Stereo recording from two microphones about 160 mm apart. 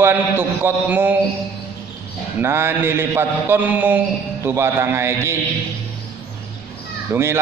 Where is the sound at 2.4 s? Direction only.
15° right (ahead or behind).